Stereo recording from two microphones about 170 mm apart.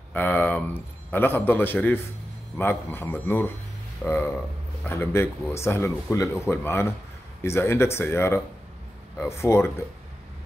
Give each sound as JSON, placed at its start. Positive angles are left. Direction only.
{"t": 0.1, "sound": "speech", "side_deg": 10}